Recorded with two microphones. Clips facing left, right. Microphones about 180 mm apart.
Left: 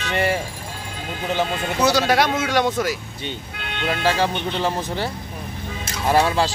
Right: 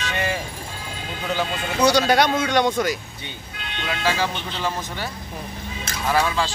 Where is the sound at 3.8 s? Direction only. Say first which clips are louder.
Left 3 dB; 35° left (ahead or behind).